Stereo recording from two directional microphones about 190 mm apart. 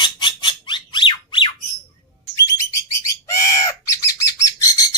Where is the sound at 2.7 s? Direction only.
15° left (ahead or behind).